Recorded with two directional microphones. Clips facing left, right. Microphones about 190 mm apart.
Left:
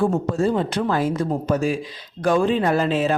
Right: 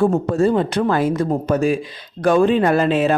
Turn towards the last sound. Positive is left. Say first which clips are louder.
# right 4 dB
turn(degrees=-60)  # may be behind; listen again after turning